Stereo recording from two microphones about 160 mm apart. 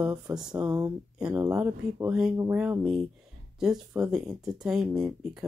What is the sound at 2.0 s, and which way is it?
Speech, 5° right (ahead or behind).